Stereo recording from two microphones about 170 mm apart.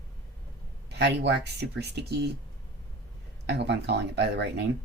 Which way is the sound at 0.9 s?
85° right.